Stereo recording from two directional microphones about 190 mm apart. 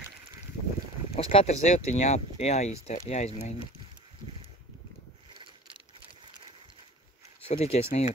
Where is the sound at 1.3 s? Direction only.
35° left (ahead or behind).